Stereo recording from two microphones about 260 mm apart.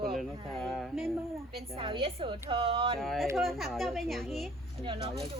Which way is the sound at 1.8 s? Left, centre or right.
Centre.